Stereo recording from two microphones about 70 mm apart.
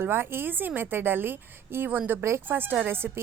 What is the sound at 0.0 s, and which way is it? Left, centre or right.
A woman's voice, right.